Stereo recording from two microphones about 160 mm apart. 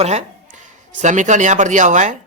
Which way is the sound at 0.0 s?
45° right (ahead or behind).